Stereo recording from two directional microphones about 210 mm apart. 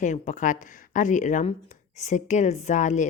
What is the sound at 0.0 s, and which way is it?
A woman's voice, 35° left (ahead or behind).